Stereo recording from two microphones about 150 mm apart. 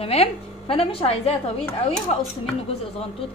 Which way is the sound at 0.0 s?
40° left (ahead or behind).